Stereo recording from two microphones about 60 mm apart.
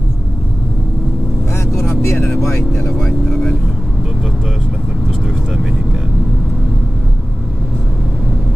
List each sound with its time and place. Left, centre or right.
2.0 s vehicle: left
2.4 s vehicle: centre